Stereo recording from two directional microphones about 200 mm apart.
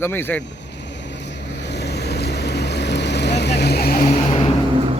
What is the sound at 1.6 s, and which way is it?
Boat, 60° left (ahead or behind).